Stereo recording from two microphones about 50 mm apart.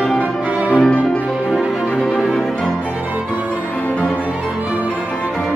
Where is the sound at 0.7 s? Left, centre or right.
Left.